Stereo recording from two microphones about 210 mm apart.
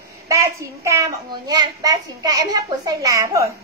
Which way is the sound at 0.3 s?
15° right (ahead or behind).